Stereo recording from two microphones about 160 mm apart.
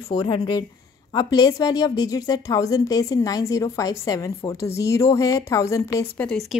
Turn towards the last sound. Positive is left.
turn(degrees=5)  # may be behind; listen again after turning